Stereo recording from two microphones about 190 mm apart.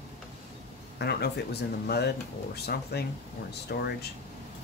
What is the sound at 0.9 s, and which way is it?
Speech, 60° left (ahead or behind).